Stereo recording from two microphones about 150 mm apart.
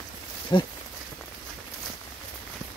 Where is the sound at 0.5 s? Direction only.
30° left (ahead or behind).